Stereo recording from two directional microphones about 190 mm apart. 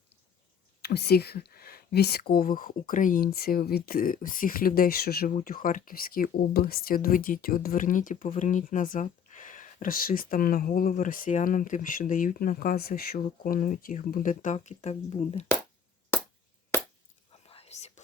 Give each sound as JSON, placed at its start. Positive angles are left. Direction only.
{"t": 0.8, "sound": "speech", "side_deg": 55}
{"t": 17.5, "sound": "whispering", "side_deg": 35}